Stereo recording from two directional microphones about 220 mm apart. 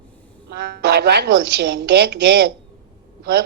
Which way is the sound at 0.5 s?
45° right (ahead or behind).